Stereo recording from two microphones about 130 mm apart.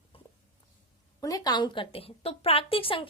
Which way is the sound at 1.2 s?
25° left (ahead or behind).